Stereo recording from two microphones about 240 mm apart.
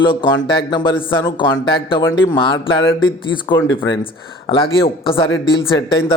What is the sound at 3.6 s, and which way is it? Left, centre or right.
Speech, left.